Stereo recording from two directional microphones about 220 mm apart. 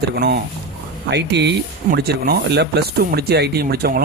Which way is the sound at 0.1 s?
45° right (ahead or behind).